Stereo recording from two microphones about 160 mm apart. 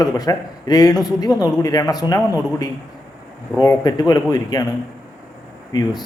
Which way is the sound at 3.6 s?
25° left (ahead or behind).